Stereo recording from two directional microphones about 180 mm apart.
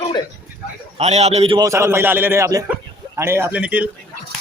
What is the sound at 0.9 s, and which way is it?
Speech, 35° right (ahead or behind).